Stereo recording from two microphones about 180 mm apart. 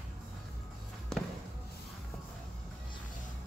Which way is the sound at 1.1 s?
5° left (ahead or behind).